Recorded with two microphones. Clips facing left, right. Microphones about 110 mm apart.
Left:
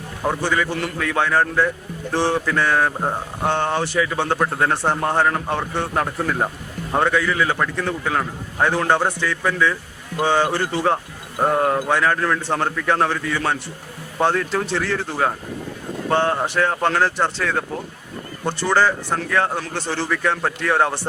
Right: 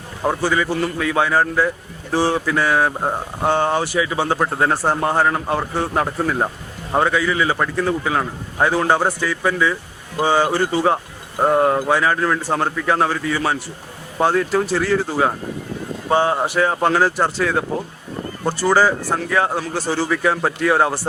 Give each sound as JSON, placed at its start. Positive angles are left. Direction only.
{"t": 0.2, "sound": "speech", "side_deg": -10}